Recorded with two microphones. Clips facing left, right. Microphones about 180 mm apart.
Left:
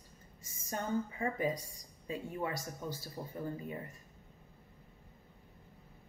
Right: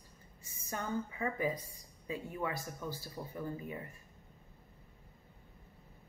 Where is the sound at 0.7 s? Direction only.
30° left (ahead or behind).